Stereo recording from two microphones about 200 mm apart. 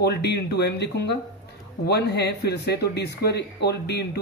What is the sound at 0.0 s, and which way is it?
Speech, 55° left (ahead or behind).